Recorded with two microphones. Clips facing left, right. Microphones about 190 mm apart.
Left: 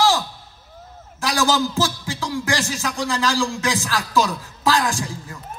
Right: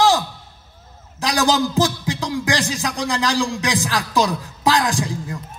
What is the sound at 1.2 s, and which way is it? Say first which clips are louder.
A man's voice: right 2 dB; 20° right (ahead or behind).